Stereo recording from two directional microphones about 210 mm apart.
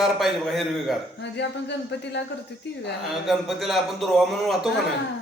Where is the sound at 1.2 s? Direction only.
55° left (ahead or behind).